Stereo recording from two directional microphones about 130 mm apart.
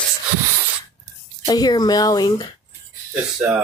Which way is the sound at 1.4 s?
30° left (ahead or behind).